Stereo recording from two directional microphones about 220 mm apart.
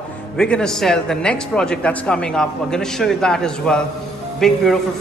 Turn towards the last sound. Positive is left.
turn(degrees=0)  # may be behind; listen again after turning